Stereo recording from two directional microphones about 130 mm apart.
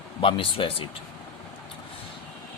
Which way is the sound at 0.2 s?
45° left (ahead or behind).